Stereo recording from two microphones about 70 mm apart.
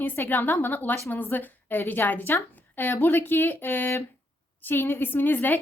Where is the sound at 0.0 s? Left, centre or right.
Left.